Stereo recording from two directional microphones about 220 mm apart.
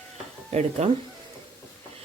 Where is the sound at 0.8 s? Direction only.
30° right (ahead or behind).